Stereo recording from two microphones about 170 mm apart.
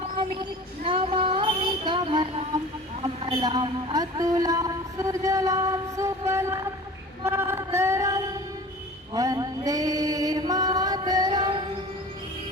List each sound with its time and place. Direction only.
0.9 s child singing: 30° right (ahead or behind)
3.2 s speech: 25° right (ahead or behind)
7.3 s male singing: 15° right (ahead or behind)
9.1 s mantra: 20° right (ahead or behind)